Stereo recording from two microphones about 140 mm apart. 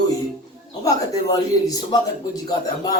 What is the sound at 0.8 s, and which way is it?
Speech, 25° left (ahead or behind).